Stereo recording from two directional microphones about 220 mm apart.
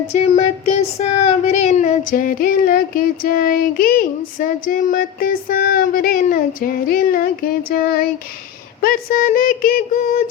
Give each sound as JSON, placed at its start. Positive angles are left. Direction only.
{"t": 0.1, "sound": "child singing", "side_deg": 30}